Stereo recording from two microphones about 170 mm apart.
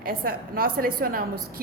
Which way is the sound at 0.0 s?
60° right (ahead or behind).